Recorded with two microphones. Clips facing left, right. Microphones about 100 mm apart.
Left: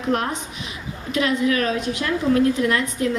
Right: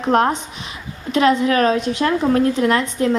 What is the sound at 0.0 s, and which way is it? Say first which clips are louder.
A woman's voice: right 6 dB; 40° right (ahead or behind).